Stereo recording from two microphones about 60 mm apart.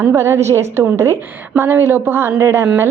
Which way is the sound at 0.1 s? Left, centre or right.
Right.